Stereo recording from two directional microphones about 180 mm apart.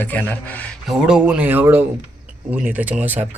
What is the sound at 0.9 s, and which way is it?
Speech, 5° right (ahead or behind).